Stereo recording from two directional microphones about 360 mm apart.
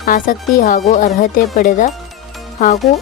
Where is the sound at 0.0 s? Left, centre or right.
Left.